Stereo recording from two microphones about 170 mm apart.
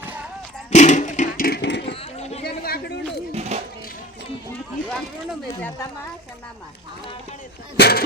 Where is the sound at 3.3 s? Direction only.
40° right (ahead or behind).